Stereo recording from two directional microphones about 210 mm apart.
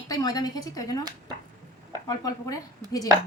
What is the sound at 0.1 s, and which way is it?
Speech, 15° left (ahead or behind).